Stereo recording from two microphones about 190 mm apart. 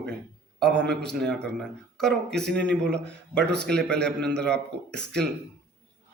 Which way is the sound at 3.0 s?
65° right (ahead or behind).